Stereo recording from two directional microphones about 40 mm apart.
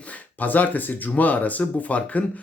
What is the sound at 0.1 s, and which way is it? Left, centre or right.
Speech, left.